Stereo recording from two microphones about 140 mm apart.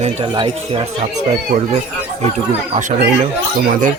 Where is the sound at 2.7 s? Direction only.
60° right (ahead or behind).